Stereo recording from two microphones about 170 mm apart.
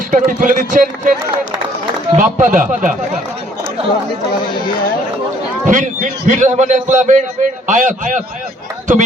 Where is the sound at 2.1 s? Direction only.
50° right (ahead or behind).